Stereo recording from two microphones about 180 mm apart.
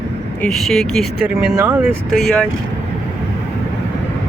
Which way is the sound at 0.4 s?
Centre (ahead or behind).